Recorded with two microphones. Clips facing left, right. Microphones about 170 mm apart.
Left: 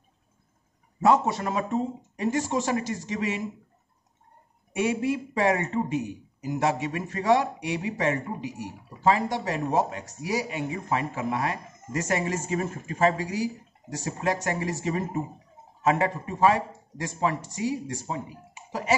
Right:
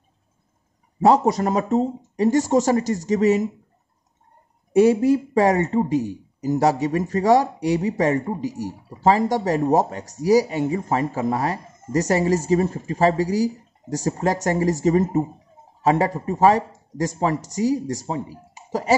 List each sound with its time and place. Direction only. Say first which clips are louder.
1.0 s speech: right 5 dB; 35° right (ahead or behind)
4.7 s speech: right 10 dB; 40° right (ahead or behind)